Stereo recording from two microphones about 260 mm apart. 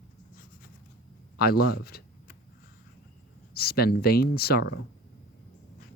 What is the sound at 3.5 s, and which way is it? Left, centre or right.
Speech, left.